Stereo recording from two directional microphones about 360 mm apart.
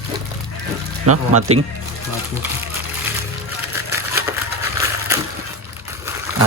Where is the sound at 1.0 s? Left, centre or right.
Right.